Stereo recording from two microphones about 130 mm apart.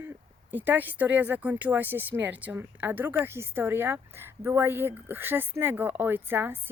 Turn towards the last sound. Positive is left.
turn(degrees=-15)  # may be behind; listen again after turning